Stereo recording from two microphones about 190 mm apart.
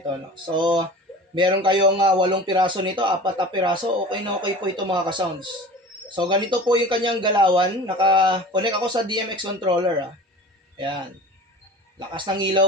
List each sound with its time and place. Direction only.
0.3 s a man's voice: 25° right (ahead or behind)
12.1 s a man's voice: 25° right (ahead or behind)